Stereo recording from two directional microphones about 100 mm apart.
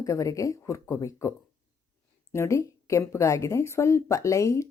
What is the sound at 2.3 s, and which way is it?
A woman's voice, 30° left (ahead or behind).